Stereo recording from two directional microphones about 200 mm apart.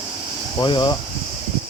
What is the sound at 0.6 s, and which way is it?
Speech, 20° left (ahead or behind).